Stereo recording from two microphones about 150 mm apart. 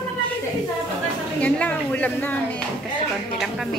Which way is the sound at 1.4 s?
10° left (ahead or behind).